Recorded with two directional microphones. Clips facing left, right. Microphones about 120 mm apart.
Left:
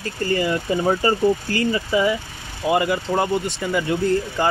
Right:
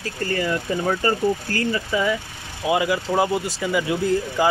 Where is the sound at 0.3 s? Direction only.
10° left (ahead or behind).